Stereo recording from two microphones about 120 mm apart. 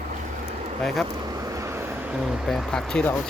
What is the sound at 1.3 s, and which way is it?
Vehicle, 30° right (ahead or behind).